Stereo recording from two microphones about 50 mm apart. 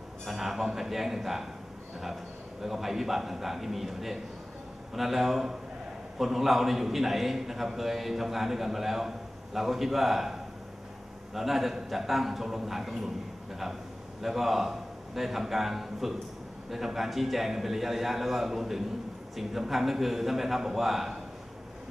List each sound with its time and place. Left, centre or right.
0.2 s a man's voice: centre
2.6 s a man's voice: centre
14.2 s a man's voice: centre